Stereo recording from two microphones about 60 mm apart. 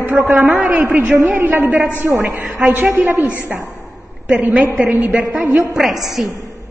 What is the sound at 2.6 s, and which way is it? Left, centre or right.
Speech, right.